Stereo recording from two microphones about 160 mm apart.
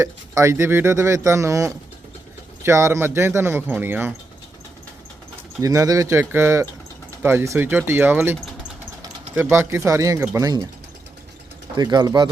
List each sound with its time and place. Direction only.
0.0 s speech: 20° right (ahead or behind)
5.6 s speech: 20° right (ahead or behind)
11.8 s speech: 25° right (ahead or behind)